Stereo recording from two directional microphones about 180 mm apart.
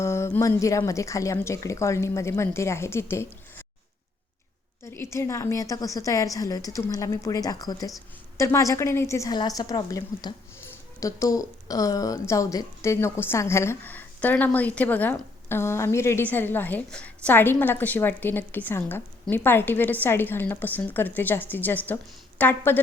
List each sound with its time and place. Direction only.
0.0 s a woman's voice: 15° left (ahead or behind)
4.8 s a woman's voice: 15° left (ahead or behind)